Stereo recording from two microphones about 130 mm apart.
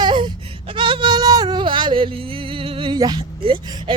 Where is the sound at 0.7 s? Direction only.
40° right (ahead or behind).